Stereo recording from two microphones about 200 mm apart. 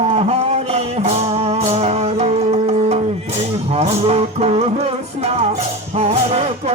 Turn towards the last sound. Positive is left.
turn(degrees=-30)  # may be behind; listen again after turning